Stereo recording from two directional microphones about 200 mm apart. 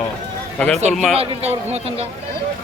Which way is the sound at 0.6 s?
5° left (ahead or behind).